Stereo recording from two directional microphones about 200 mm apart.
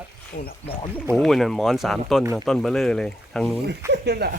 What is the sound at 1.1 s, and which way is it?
Speech, centre (ahead or behind).